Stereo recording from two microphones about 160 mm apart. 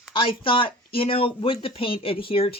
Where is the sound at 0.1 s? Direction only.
35° left (ahead or behind).